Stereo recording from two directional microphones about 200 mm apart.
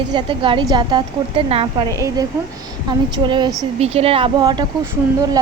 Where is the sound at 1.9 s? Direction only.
15° right (ahead or behind).